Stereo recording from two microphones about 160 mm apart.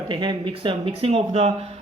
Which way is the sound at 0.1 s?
30° right (ahead or behind).